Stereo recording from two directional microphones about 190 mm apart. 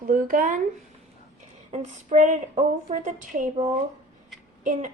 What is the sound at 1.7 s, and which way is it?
Speech, 40° right (ahead or behind).